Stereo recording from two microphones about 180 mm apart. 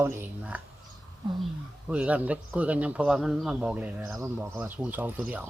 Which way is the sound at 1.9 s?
10° right (ahead or behind).